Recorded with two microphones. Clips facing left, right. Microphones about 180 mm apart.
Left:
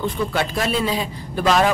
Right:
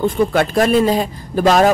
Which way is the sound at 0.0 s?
50° right (ahead or behind).